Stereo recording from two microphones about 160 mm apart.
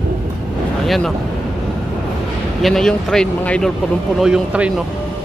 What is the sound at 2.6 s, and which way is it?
Speech, centre (ahead or behind).